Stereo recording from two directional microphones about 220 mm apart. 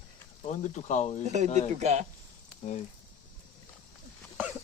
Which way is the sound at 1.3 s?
30° right (ahead or behind).